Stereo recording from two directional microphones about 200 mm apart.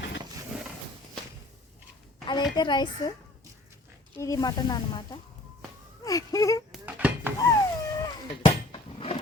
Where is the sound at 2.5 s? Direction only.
20° left (ahead or behind).